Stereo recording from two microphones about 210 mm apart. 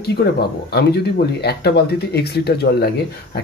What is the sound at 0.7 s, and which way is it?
Speech, 50° left (ahead or behind).